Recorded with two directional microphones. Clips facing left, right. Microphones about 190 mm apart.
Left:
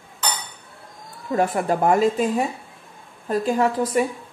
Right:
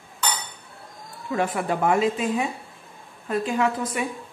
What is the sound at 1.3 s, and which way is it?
A woman's voice, 40° left (ahead or behind).